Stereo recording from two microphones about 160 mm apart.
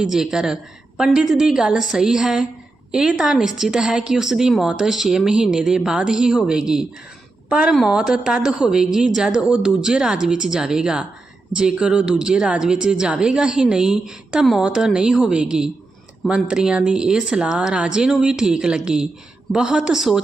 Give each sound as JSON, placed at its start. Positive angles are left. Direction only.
{"t": 0.0, "sound": "a woman's voice", "side_deg": -5}